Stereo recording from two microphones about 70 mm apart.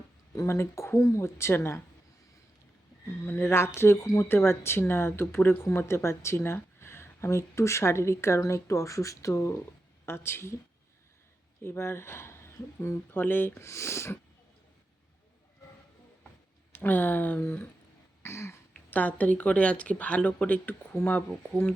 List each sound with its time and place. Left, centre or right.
0.3 s speech: left
3.2 s speech: left
10.1 s speech: left
11.6 s speech: left
13.7 s speech: left
16.7 s speech: left
18.2 s throat clearing: left
18.7 s speech: left
20.9 s speech: left